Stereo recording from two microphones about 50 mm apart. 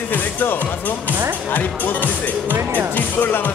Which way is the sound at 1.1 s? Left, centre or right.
Right.